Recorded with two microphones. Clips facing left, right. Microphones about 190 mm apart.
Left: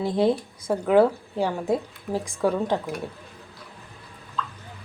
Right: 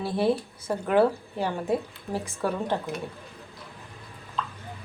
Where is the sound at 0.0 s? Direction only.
15° left (ahead or behind).